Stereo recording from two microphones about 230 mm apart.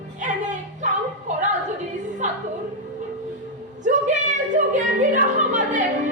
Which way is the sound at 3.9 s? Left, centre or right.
Right.